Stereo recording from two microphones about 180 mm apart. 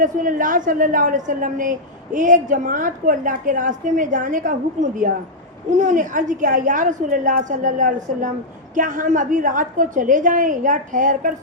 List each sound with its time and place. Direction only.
0.0 s a woman's voice: 50° right (ahead or behind)